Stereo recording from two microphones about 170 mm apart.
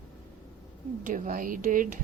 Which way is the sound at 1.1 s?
50° right (ahead or behind).